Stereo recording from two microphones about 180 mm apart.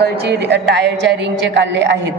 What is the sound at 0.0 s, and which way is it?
A woman's voice, 65° right (ahead or behind).